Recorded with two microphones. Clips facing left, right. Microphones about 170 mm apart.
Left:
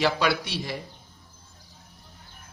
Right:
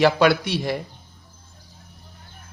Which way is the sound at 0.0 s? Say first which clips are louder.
Right 7 dB; 55° right (ahead or behind).